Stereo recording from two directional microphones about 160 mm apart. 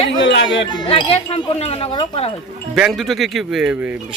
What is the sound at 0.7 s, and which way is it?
Speech, 30° left (ahead or behind).